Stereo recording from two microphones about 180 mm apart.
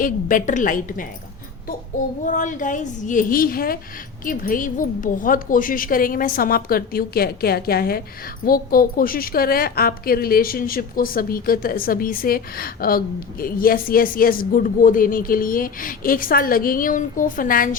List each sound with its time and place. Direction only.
0.0 s a woman's voice: 50° left (ahead or behind)
2.2 s a woman's voice: 45° left (ahead or behind)